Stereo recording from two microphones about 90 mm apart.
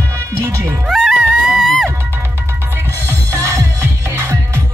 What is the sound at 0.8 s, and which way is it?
Music, centre (ahead or behind).